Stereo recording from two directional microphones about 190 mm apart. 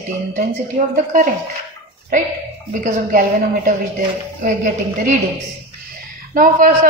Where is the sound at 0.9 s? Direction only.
45° right (ahead or behind).